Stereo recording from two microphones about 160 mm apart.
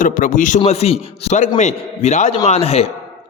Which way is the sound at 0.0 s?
55° left (ahead or behind).